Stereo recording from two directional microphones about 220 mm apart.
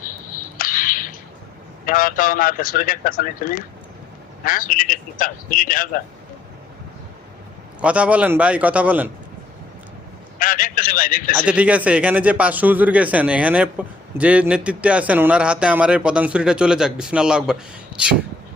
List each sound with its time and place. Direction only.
0.5 s a sound: 40° left (ahead or behind)
1.8 s speech: 40° left (ahead or behind)
7.8 s a man's voice: 5° right (ahead or behind)
10.3 s a man's voice: 40° left (ahead or behind)
11.3 s speech: 5° right (ahead or behind)